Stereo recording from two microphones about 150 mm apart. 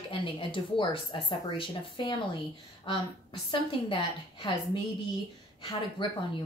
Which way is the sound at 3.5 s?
35° left (ahead or behind).